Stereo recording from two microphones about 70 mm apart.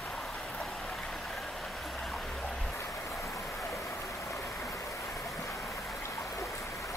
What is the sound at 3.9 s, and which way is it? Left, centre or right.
Stream, left.